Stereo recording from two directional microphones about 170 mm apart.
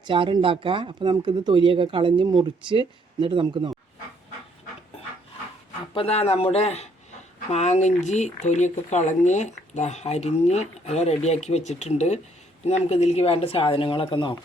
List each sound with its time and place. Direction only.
0.0 s speech: 30° right (ahead or behind)
5.9 s speech: 35° left (ahead or behind)